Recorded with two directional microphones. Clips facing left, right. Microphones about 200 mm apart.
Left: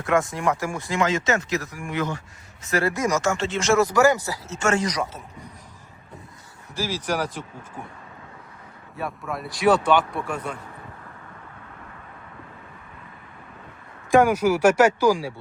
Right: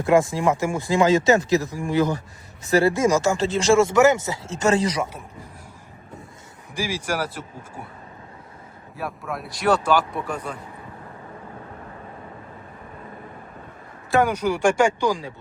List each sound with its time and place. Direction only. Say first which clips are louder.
0.0 s speech: right 4 dB; 30° right (ahead or behind)
4.5 s speech: right 3 dB; 35° right (ahead or behind)
6.7 s speech: even; 10° right (ahead or behind)
9.0 s speech: even; centre (ahead or behind)
14.1 s speech: left 3 dB; 10° left (ahead or behind)